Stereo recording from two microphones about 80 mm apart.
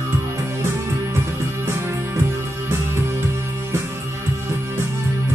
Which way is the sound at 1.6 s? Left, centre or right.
Right.